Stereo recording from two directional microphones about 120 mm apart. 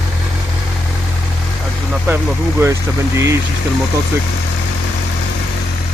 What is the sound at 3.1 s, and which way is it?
Speech, 25° right (ahead or behind).